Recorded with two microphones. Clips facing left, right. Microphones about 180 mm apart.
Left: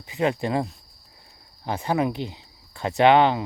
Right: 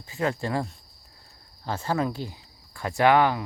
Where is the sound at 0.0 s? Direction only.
20° left (ahead or behind).